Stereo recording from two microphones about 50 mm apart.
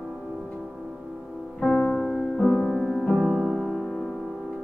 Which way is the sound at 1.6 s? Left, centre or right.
Centre.